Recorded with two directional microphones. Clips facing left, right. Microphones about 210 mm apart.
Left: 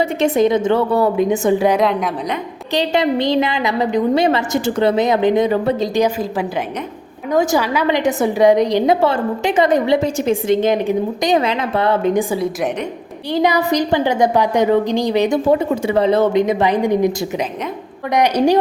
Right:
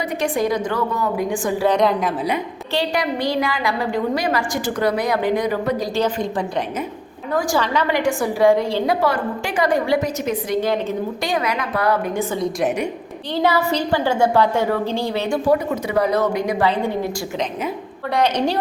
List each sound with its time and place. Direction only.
0.0 s a woman's voice: 25° left (ahead or behind)
1.7 s a woman's voice: centre (ahead or behind)
2.7 s a woman's voice: 25° left (ahead or behind)
7.6 s a woman's voice: 10° left (ahead or behind)
7.9 s a woman's voice: 20° left (ahead or behind)
13.3 s a woman's voice: 15° left (ahead or behind)
18.1 s a woman's voice: 15° left (ahead or behind)